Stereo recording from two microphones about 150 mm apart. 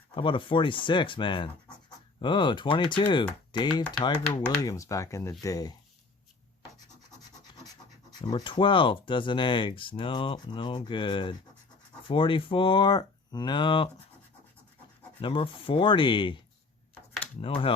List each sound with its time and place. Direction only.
0.1 s speech: 35° left (ahead or behind)
8.2 s speech: 30° left (ahead or behind)
15.2 s speech: 35° left (ahead or behind)
17.4 s speech: 35° left (ahead or behind)